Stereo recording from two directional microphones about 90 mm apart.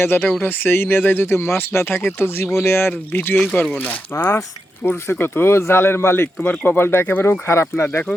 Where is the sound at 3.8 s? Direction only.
30° left (ahead or behind).